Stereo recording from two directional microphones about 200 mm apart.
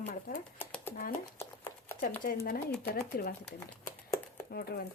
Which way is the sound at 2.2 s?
50° left (ahead or behind).